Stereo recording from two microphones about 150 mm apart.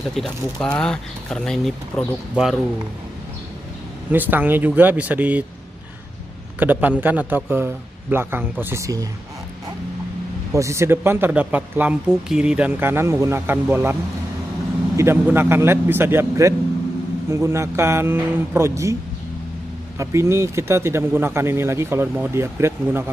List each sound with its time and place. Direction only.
0.1 s speech: 5° left (ahead or behind)
4.1 s a man's voice: 10° right (ahead or behind)
6.6 s a man's voice: 10° right (ahead or behind)
10.5 s a man's voice: 20° right (ahead or behind)
15.0 s a man's voice: 15° right (ahead or behind)
20.0 s a man's voice: 20° right (ahead or behind)